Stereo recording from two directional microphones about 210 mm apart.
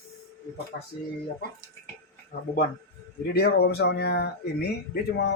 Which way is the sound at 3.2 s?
50° left (ahead or behind).